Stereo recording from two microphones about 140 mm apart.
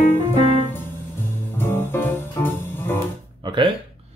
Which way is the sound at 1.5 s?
15° left (ahead or behind).